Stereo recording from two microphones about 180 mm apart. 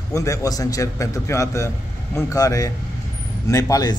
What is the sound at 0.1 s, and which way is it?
A man's voice, 15° left (ahead or behind).